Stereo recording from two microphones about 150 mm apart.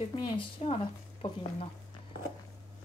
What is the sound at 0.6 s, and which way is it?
Speech, 45° left (ahead or behind).